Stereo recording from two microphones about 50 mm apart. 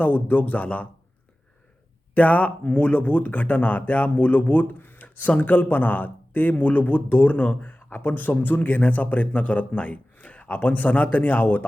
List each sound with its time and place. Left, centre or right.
0.0 s speech: left
2.1 s speech: left